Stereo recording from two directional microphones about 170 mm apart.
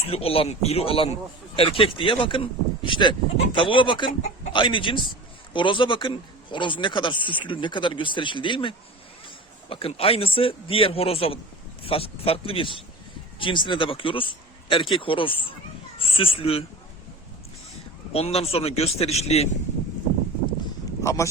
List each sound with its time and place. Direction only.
0.1 s speech: 35° left (ahead or behind)
18.1 s speech: 35° left (ahead or behind)
21.0 s speech: 15° left (ahead or behind)